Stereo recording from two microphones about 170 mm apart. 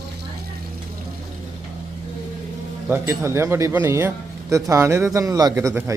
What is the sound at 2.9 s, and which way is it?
Speech, 15° right (ahead or behind).